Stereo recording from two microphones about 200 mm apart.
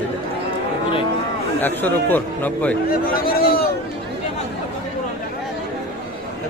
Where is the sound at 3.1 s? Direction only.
50° left (ahead or behind).